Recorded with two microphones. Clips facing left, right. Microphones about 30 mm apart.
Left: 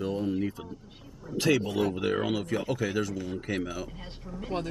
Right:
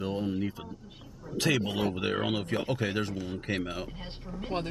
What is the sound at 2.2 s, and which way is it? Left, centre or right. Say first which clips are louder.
Speech: left 1 dB; right.